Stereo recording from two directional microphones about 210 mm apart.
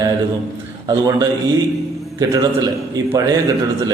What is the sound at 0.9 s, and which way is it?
A man's voice, 20° right (ahead or behind).